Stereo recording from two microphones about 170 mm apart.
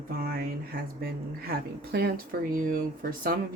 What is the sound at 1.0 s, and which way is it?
Speech, 65° right (ahead or behind).